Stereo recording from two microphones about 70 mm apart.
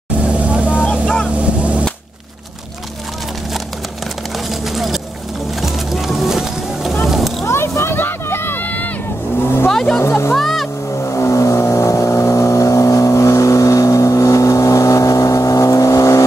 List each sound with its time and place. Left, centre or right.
0.2 s vehicle: centre
1.0 s motorboat: centre
1.4 s a sound: centre
4.5 s vehicle: centre
5.6 s music: centre
7.1 s vehicle: centre
7.4 s vehicle: left
8.6 s music: left
9.4 s vehicle: left
9.7 s vehicle: centre
9.9 s music: left
10.3 s boat: centre
11.0 s vehicle: left